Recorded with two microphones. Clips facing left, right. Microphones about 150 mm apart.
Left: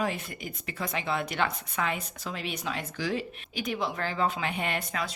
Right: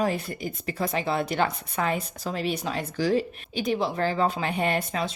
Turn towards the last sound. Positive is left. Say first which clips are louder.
# right 6 dB
turn(degrees=-30)  # may be behind; listen again after turning